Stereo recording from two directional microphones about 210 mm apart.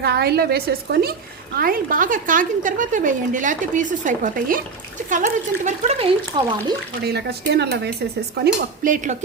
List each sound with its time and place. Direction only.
0.0 s a woman's voice: 50° right (ahead or behind); by 6.5 s 25° right (ahead or behind)
7.0 s a woman's voice: 50° right (ahead or behind)
8.4 s a woman's voice: 40° right (ahead or behind)